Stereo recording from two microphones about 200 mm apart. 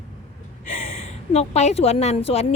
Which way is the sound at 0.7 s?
35° left (ahead or behind).